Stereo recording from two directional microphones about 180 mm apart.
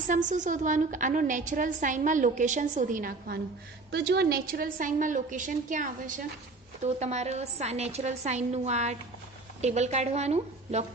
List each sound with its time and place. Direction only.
0.1 s a woman's voice: 45° right (ahead or behind)
3.9 s a woman's voice: 70° right (ahead or behind); by 10.8 s 35° right (ahead or behind)